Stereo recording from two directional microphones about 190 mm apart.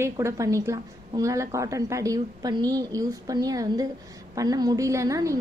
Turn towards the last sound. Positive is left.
turn(degrees=-15)  # may be behind; listen again after turning